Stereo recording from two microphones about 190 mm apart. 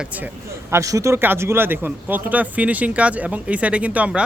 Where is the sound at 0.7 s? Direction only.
15° right (ahead or behind).